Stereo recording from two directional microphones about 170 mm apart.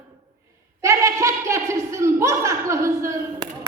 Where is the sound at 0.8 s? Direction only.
15° right (ahead or behind).